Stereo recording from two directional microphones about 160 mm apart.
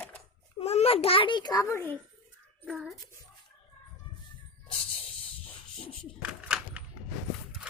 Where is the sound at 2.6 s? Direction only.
5° right (ahead or behind).